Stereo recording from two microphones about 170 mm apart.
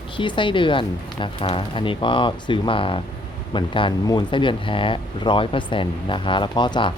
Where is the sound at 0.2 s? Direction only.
30° left (ahead or behind).